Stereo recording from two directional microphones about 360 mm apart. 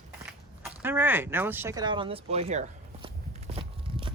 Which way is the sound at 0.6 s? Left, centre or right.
Centre.